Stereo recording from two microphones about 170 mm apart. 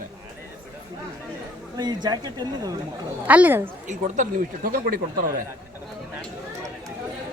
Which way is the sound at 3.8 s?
55° right (ahead or behind).